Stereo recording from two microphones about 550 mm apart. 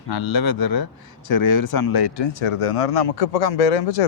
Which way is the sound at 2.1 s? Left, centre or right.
Left.